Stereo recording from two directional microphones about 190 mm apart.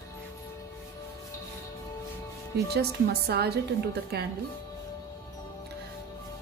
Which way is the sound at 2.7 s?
55° right (ahead or behind).